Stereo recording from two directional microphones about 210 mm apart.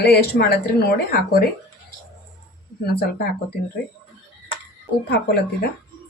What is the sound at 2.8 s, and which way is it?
Speech, 50° left (ahead or behind).